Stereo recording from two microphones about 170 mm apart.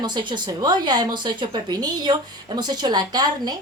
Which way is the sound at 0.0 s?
25° right (ahead or behind).